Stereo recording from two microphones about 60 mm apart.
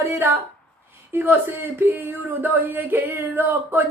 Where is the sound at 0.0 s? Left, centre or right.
Right.